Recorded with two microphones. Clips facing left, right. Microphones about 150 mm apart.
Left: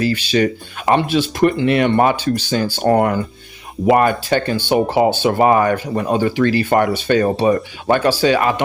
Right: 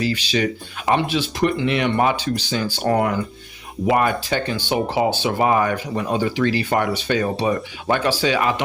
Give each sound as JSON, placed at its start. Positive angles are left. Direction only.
{"t": 0.0, "sound": "speech", "side_deg": 50}